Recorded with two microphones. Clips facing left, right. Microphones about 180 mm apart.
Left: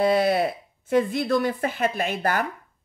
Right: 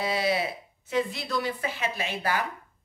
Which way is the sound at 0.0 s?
55° left (ahead or behind).